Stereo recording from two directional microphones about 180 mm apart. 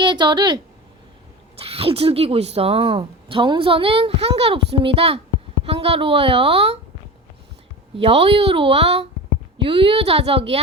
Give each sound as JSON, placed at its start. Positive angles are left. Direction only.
{"t": 0.0, "sound": "speech", "side_deg": -25}
{"t": 7.9, "sound": "speech", "side_deg": -30}